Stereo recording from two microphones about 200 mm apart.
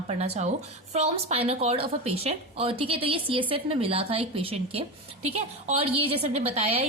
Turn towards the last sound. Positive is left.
turn(degrees=-30)  # may be behind; listen again after turning